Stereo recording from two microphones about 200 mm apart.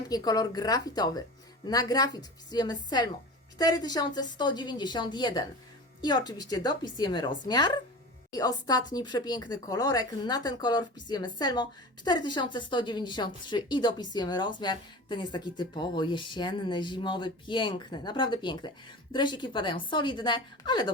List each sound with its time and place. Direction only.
0.1 s a woman's voice: 20° left (ahead or behind)